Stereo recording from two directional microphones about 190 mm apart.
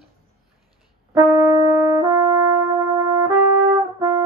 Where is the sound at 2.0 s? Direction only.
20° right (ahead or behind).